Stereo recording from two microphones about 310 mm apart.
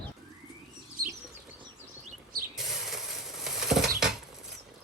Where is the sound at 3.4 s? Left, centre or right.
Centre.